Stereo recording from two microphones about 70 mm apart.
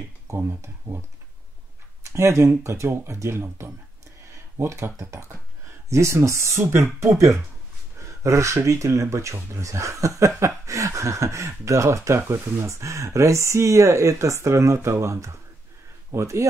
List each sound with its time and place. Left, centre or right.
0.3 s speech: right
2.1 s speech: right